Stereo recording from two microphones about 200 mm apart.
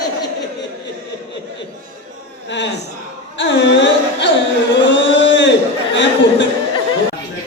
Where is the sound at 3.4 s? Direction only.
60° left (ahead or behind).